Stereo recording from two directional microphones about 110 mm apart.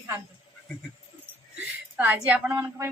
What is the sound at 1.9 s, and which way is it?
Speech, 15° right (ahead or behind).